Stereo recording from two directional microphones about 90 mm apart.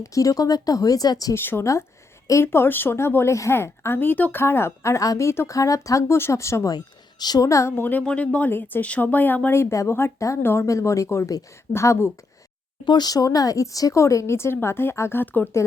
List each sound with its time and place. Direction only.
0.0 s speech: 40° left (ahead or behind)
1.3 s speech: 25° left (ahead or behind)
6.7 s speech: 50° left (ahead or behind)
7.4 s speech: 35° left (ahead or behind)
7.8 s speech: 20° left (ahead or behind)
12.8 s speech: 55° left (ahead or behind); by 15.4 s 20° left (ahead or behind)